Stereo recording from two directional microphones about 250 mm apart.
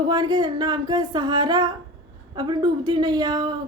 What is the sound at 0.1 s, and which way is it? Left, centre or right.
Speech, centre.